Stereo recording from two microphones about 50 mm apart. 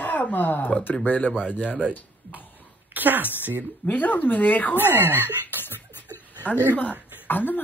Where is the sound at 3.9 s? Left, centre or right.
Left.